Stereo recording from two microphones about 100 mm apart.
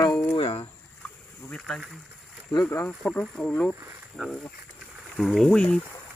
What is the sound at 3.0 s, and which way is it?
Speech, 10° left (ahead or behind).